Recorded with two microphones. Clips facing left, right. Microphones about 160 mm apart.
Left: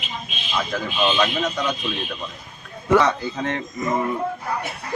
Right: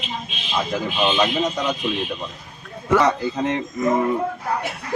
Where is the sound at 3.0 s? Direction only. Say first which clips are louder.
Right 2 dB; 5° right (ahead or behind).